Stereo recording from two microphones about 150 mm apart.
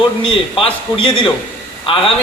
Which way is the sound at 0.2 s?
35° left (ahead or behind).